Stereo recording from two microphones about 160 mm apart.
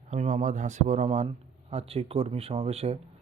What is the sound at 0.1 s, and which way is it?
A man's voice, 45° right (ahead or behind).